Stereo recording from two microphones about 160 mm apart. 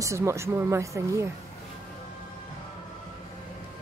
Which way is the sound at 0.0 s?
20° right (ahead or behind).